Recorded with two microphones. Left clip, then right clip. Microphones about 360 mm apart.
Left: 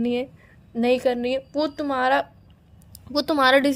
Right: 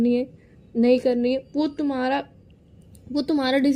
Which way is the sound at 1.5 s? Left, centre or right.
Left.